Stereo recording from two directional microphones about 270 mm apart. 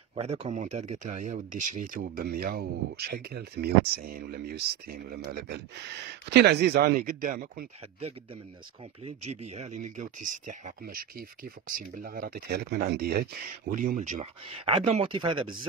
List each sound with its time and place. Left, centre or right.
0.1 s speech: right